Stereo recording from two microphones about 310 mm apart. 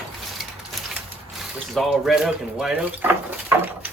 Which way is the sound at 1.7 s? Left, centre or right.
Centre.